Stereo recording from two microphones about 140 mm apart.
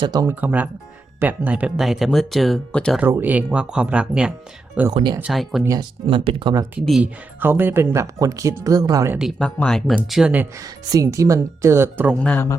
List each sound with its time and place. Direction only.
0.0 s speech: 30° right (ahead or behind)
0.3 s speech: 10° right (ahead or behind)
3.0 s speech: 15° right (ahead or behind)
5.2 s speech: centre (ahead or behind)
6.1 s speech: 35° right (ahead or behind)
7.0 s speech: 15° right (ahead or behind)
9.4 s speech: 5° left (ahead or behind)
10.6 s speech: 25° right (ahead or behind)
12.2 s speech: 10° left (ahead or behind)